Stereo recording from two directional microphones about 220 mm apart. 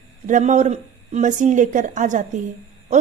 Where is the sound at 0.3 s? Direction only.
35° right (ahead or behind).